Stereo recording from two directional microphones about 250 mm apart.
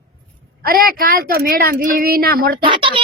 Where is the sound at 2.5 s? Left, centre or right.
Centre.